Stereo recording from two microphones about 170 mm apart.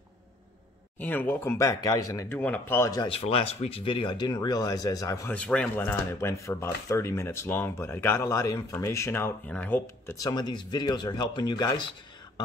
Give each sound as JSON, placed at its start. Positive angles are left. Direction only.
{"t": 0.9, "sound": "speech", "side_deg": 10}
{"t": 3.1, "sound": "speech", "side_deg": 35}